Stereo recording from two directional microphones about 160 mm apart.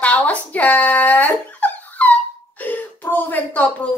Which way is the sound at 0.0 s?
10° left (ahead or behind).